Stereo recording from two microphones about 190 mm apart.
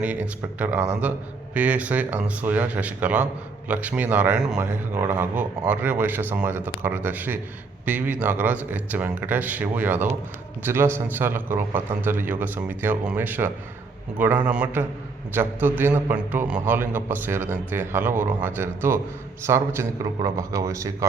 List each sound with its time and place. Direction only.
0.0 s speech: 10° right (ahead or behind)